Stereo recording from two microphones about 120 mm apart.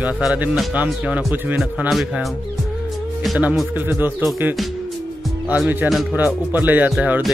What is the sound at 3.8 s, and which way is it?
Speech, 15° right (ahead or behind).